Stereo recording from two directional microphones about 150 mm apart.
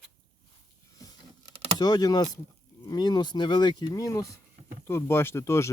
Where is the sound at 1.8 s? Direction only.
25° left (ahead or behind).